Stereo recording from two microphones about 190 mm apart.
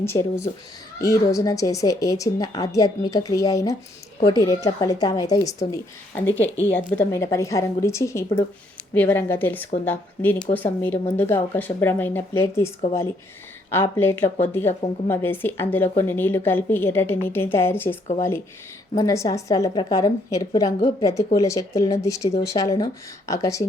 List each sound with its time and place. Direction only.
0.0 s speech: 15° left (ahead or behind)
13.8 s a woman's voice: 10° left (ahead or behind)